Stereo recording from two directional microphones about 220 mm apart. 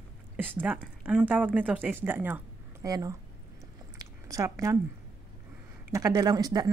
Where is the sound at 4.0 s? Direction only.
15° right (ahead or behind).